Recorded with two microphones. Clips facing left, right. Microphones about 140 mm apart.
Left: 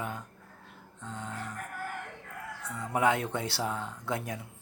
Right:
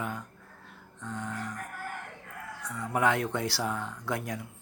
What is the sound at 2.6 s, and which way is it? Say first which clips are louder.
Speech: even; 20° left (ahead or behind).